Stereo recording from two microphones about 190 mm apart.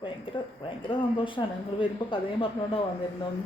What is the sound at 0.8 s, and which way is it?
Speech, 25° left (ahead or behind).